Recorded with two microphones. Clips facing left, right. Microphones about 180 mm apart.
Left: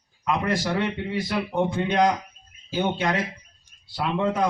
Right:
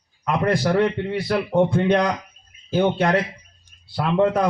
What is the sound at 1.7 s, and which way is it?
A man's voice, 60° right (ahead or behind).